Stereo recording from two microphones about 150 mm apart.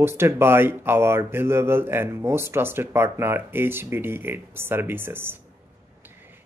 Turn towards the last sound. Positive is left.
turn(degrees=-15)  # may be behind; listen again after turning